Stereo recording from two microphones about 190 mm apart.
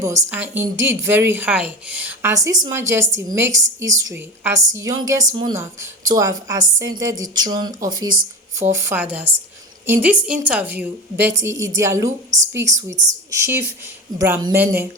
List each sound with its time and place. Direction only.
0.0 s a woman's voice: 15° right (ahead or behind)